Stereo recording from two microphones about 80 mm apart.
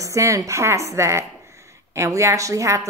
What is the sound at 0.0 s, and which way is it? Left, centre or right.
A woman's voice, right.